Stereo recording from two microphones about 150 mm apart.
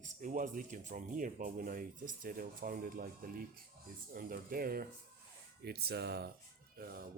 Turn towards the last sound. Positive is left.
turn(degrees=-90)